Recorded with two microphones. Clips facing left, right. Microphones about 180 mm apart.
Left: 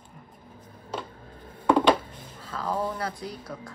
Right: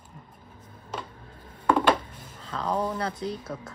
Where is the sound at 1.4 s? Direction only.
10° left (ahead or behind).